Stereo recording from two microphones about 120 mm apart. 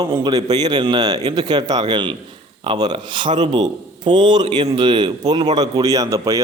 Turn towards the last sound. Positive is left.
turn(degrees=-30)  # may be behind; listen again after turning